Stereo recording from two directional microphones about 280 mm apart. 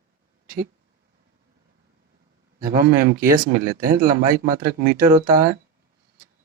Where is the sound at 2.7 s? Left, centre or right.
Right.